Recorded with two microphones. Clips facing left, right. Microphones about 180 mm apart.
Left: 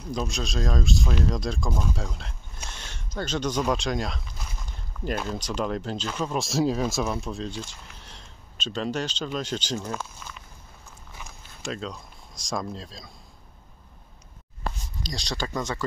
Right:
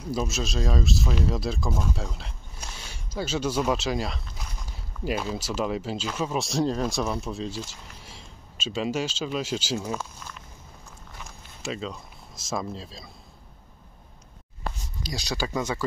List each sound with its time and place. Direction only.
0.1 s speech: 5° right (ahead or behind)
11.1 s a sound: centre (ahead or behind)
15.0 s speech: 5° right (ahead or behind)